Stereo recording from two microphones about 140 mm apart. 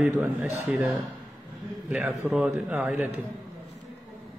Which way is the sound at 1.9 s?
15° right (ahead or behind).